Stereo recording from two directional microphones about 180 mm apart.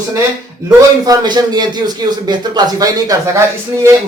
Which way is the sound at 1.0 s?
20° right (ahead or behind).